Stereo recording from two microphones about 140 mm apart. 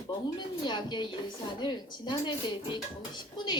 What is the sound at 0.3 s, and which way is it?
Speech, 30° left (ahead or behind).